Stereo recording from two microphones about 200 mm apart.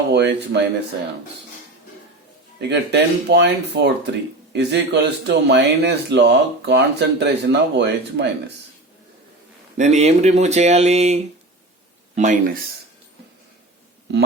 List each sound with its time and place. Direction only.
0.1 s a man's voice: 55° right (ahead or behind)
2.6 s a man's voice: 60° right (ahead or behind)
9.7 s speech: 35° right (ahead or behind)